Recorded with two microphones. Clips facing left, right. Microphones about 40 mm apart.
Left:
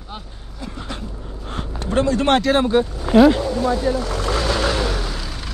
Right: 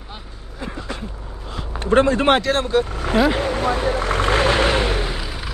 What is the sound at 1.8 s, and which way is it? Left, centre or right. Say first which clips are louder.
Speech: right 3 dB; right.